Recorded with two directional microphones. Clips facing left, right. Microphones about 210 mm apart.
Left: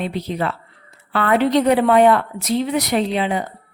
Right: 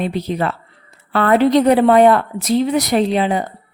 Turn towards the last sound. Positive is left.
turn(degrees=-40)  # may be behind; listen again after turning